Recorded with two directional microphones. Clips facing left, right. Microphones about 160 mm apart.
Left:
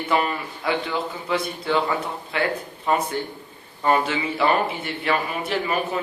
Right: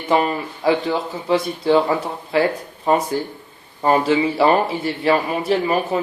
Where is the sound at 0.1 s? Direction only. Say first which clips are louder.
Right 6 dB; 35° right (ahead or behind).